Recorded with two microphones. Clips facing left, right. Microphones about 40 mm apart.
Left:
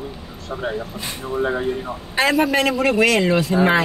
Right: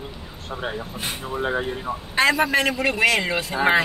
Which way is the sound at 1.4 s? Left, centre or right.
Centre.